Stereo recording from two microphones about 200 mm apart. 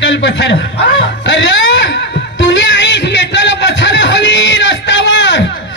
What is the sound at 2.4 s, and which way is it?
Music, 65° left (ahead or behind).